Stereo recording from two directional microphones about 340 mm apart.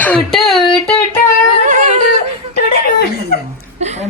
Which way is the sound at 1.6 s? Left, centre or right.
Right.